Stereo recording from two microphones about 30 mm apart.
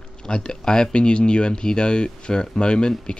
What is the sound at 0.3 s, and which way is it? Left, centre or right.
Speech, left.